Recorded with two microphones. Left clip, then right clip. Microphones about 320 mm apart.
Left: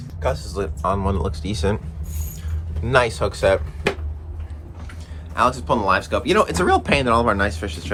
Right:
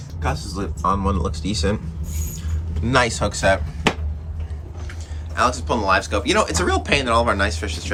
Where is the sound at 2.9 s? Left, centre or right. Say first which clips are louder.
Left 1 dB; centre.